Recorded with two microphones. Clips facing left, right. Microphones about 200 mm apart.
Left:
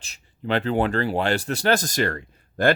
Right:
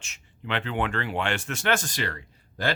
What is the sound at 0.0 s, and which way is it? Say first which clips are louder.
Speech: left 7 dB; 35° left (ahead or behind).